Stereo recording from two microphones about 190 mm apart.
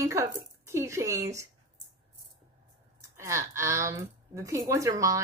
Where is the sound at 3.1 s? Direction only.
15° right (ahead or behind).